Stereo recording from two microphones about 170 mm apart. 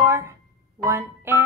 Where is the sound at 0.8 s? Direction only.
15° right (ahead or behind).